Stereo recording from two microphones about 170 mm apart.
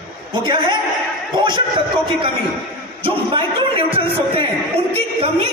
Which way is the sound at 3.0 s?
30° right (ahead or behind).